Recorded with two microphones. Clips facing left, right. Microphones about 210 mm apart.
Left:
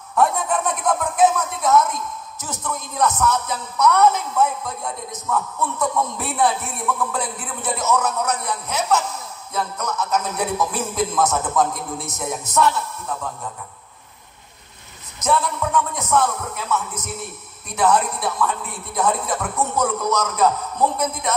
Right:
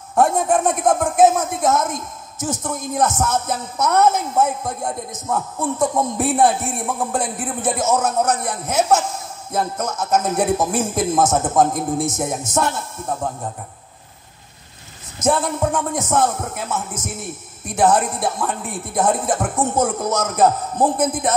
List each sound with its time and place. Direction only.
0.1 s speech: 45° right (ahead or behind)
15.1 s speech: 45° right (ahead or behind)